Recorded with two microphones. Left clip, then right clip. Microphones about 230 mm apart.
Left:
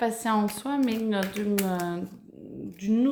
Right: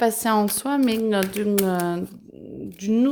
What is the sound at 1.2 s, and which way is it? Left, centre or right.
Speech, right.